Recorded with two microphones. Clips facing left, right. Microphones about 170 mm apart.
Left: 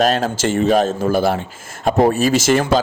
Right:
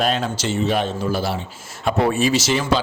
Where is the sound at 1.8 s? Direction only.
40° left (ahead or behind).